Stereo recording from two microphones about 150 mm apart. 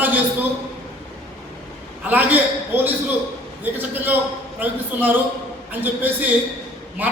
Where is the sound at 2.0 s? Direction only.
10° right (ahead or behind).